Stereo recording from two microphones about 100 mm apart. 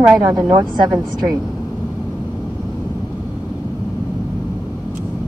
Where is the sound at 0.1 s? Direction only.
35° right (ahead or behind).